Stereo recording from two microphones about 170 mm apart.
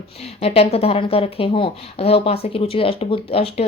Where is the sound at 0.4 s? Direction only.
35° left (ahead or behind).